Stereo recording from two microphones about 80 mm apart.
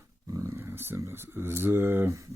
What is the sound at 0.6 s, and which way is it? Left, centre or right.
Speech, right.